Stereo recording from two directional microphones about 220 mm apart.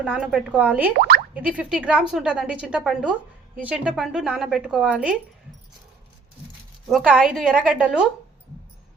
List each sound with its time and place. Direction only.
0.0 s a woman's voice: 5° right (ahead or behind)
0.9 s speech: 45° right (ahead or behind)
1.3 s a woman's voice: 5° right (ahead or behind)
6.8 s a woman's voice: 5° right (ahead or behind)